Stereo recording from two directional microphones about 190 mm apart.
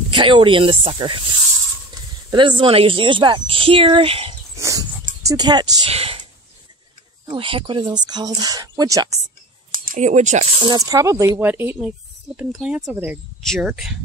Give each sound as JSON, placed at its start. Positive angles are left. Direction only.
{"t": 0.1, "sound": "speech", "side_deg": -25}
{"t": 2.3, "sound": "speech", "side_deg": -25}
{"t": 4.6, "sound": "dog", "side_deg": -15}
{"t": 5.2, "sound": "speech", "side_deg": -20}
{"t": 5.9, "sound": "a sound", "side_deg": -30}
{"t": 7.2, "sound": "speech", "side_deg": -25}
{"t": 9.8, "sound": "speech", "side_deg": -40}
{"t": 10.6, "sound": "speech", "side_deg": -20}
{"t": 13.4, "sound": "speech", "side_deg": 0}